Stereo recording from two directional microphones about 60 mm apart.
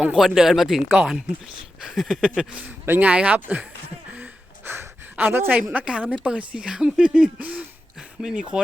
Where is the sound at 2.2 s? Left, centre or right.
Centre.